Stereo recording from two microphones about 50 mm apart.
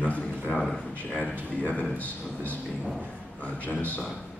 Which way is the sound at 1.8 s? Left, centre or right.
Left.